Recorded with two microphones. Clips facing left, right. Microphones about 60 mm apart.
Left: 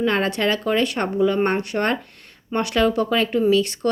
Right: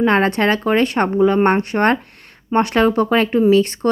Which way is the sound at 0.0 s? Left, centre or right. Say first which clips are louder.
Right 5 dB; right.